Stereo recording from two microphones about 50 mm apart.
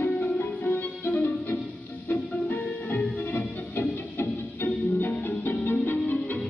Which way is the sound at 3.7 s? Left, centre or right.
Left.